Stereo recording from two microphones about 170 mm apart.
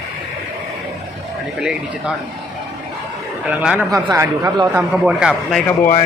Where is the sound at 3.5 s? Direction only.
5° right (ahead or behind).